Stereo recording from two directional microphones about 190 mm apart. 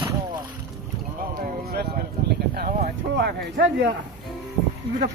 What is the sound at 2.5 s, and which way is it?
Speech, 50° right (ahead or behind).